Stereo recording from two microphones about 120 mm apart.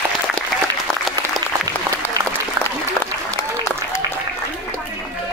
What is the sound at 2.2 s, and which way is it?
Applause, 25° right (ahead or behind).